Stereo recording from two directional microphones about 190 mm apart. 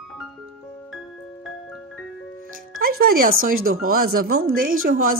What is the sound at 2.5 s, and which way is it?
Speech, 50° right (ahead or behind).